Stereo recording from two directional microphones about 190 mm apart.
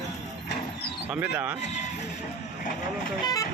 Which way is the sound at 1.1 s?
5° right (ahead or behind).